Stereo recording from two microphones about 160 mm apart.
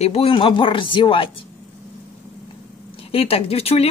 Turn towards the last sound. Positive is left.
turn(degrees=35)  # may be behind; listen again after turning